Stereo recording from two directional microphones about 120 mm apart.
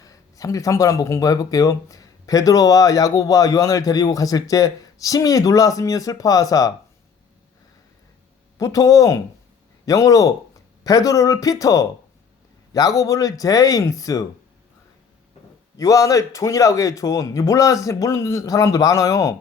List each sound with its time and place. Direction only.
0.0 s speech: 30° left (ahead or behind)
8.5 s speech: 30° left (ahead or behind)
15.8 s speech: 30° left (ahead or behind)